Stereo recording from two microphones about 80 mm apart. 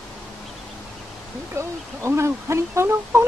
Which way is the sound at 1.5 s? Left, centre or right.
Right.